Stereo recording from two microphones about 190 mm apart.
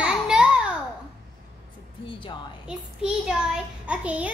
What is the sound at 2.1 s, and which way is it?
Speech, 25° left (ahead or behind).